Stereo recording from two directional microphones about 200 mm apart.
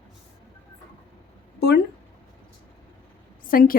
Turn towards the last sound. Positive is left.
turn(degrees=45)  # may be behind; listen again after turning